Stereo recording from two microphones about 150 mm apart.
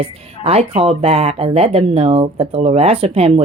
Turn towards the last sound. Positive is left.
turn(degrees=-40)  # may be behind; listen again after turning